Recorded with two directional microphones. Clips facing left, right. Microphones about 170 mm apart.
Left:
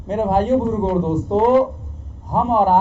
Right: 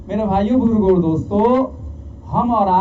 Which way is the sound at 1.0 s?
Centre (ahead or behind).